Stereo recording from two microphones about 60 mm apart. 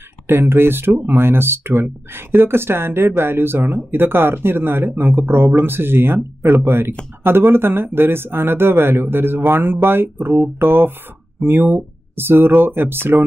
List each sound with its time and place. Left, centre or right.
0.3 s speech: right